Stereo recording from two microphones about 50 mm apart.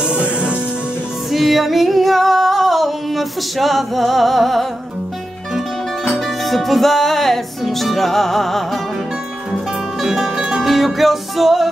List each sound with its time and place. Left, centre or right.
0.0 s music: right
1.3 s singing: centre
6.0 s music: centre
9.9 s music: centre